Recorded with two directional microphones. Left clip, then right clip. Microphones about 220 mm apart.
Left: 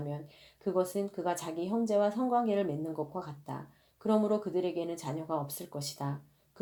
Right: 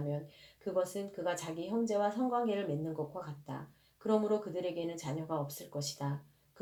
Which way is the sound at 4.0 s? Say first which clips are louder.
Left 2 dB; 40° left (ahead or behind).